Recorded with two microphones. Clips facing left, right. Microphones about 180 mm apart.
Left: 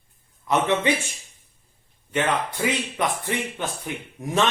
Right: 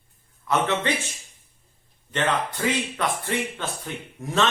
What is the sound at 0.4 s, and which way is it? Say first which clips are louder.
Speech: left 2 dB; 15° left (ahead or behind).